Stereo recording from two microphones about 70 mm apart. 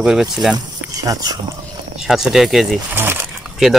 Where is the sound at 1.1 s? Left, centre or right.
Right.